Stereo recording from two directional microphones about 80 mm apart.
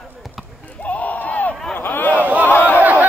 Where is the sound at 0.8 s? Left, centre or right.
Centre.